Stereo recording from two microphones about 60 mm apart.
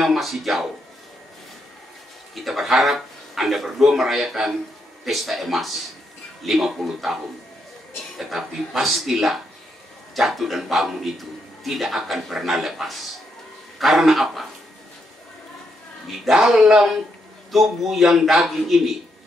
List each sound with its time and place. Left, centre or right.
0.0 s a man's voice: centre
2.3 s a man's voice: centre
8.2 s a man's voice: centre
16.1 s a man's voice: centre